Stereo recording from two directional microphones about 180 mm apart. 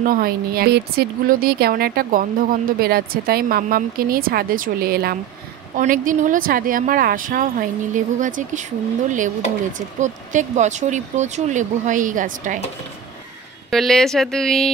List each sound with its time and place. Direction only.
0.0 s a woman's voice: 55° right (ahead or behind)
5.8 s speech: 45° right (ahead or behind)
9.7 s speech: 45° right (ahead or behind)
13.7 s speech: centre (ahead or behind)